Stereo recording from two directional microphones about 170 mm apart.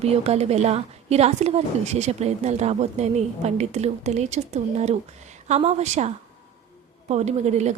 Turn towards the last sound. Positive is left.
turn(degrees=-40)  # may be behind; listen again after turning